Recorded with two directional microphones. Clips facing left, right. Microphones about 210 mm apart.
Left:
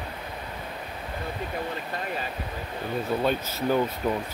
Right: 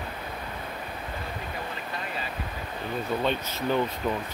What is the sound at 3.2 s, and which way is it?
Speech, 10° left (ahead or behind).